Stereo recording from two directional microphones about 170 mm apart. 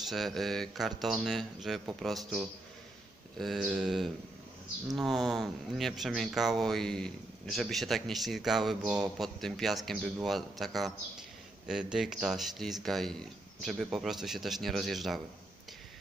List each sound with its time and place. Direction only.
0.1 s a man's voice: centre (ahead or behind)